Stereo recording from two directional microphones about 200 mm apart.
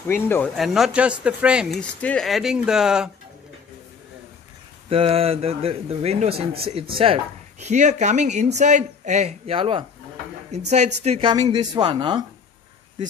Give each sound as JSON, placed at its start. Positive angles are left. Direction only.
{"t": 0.1, "sound": "speech", "side_deg": 10}
{"t": 0.6, "sound": "speech", "side_deg": 0}
{"t": 4.8, "sound": "speech", "side_deg": -30}
{"t": 11.1, "sound": "speech", "side_deg": -25}